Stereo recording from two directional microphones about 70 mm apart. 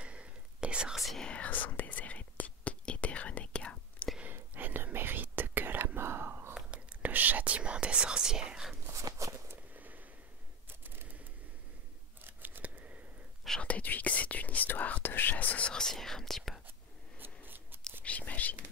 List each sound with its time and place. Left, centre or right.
0.0 s whispering: centre
0.9 s whispering: centre
1.2 s whispering: centre
4.2 s whispering: right
6.5 s whispering: centre
9.2 s a sound: right
12.3 s scissors: right
13.6 s whispering: centre
17.2 s scissors: right
18.0 s whispering: left